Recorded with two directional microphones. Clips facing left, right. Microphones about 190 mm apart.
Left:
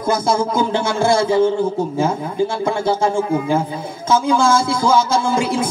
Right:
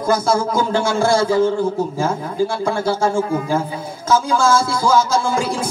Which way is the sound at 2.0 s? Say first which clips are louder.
Left 1 dB; 20° left (ahead or behind).